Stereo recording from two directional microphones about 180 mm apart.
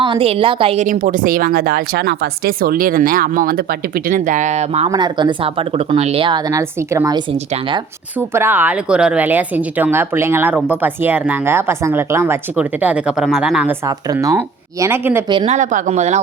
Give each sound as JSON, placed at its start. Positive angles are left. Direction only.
{"t": 0.0, "sound": "a woman's voice", "side_deg": -30}
{"t": 4.9, "sound": "speech", "side_deg": -25}
{"t": 8.3, "sound": "speech", "side_deg": -15}
{"t": 13.8, "sound": "speech", "side_deg": -20}
{"t": 15.3, "sound": "speech", "side_deg": -30}
{"t": 15.5, "sound": "speech", "side_deg": -45}